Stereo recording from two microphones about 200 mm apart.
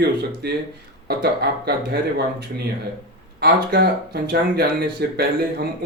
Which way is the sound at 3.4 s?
50° right (ahead or behind).